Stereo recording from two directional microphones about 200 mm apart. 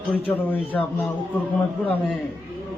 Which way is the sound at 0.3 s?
10° left (ahead or behind).